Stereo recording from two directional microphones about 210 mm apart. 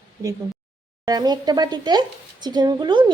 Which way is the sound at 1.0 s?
20° right (ahead or behind).